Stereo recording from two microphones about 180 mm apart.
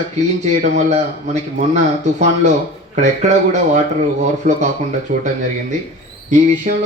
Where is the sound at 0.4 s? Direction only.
40° right (ahead or behind).